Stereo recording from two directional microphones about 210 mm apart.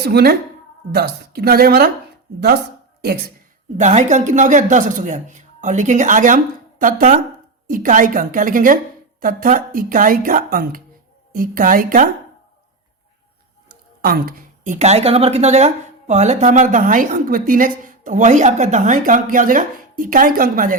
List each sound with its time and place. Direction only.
0.0 s speech: 50° right (ahead or behind)
3.0 s speech: 45° right (ahead or behind)
3.8 s a woman's voice: 35° right (ahead or behind)
13.7 s a woman's voice: 45° right (ahead or behind)